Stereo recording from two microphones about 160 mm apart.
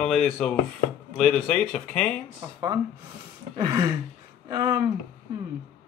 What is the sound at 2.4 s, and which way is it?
Speech, 20° right (ahead or behind).